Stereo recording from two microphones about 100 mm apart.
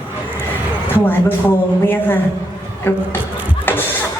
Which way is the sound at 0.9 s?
20° left (ahead or behind).